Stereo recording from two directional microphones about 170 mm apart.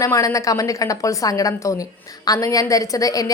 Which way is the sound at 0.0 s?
15° left (ahead or behind).